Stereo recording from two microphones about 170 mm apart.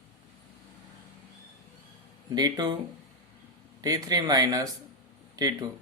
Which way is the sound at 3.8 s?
20° right (ahead or behind).